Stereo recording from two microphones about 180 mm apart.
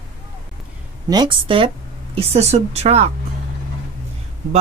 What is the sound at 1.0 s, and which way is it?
A woman's voice, 25° right (ahead or behind).